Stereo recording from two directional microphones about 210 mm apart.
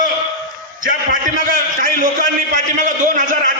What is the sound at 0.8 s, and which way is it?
A man's voice, 40° right (ahead or behind).